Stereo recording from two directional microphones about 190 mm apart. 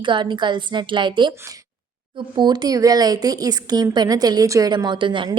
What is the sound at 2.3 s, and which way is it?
A woman's voice, 20° right (ahead or behind).